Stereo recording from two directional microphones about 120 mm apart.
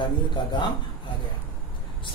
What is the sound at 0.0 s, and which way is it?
Speech, 40° left (ahead or behind).